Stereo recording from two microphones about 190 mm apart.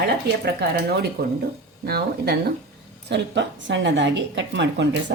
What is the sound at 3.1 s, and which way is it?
A woman's voice, 70° right (ahead or behind).